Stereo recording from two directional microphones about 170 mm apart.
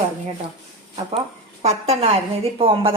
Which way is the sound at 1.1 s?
40° right (ahead or behind).